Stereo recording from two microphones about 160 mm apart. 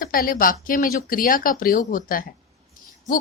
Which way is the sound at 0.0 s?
65° left (ahead or behind).